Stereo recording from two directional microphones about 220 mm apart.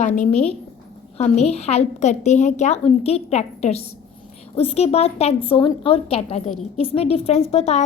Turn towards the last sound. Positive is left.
turn(degrees=30)  # may be behind; listen again after turning